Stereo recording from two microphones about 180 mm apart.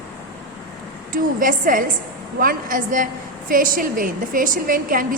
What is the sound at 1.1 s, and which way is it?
A woman's voice, 50° right (ahead or behind).